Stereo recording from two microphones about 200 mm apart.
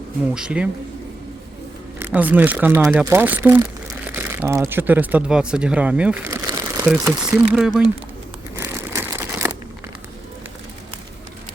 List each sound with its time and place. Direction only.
0.3 s speech: 5° right (ahead or behind)
2.0 s speech: 10° right (ahead or behind)
8.5 s crumpling: 15° right (ahead or behind)